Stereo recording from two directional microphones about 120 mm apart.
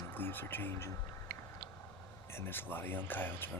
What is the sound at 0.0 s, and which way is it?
Speech, 15° left (ahead or behind).